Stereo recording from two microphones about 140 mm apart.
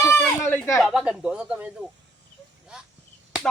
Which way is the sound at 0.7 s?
Centre (ahead or behind).